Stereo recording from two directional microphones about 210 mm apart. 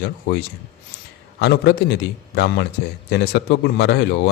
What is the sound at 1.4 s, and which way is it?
Speech, 55° left (ahead or behind).